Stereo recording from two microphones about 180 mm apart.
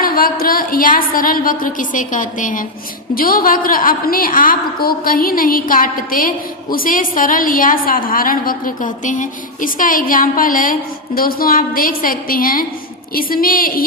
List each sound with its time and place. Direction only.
0.0 s a woman's voice: 50° left (ahead or behind)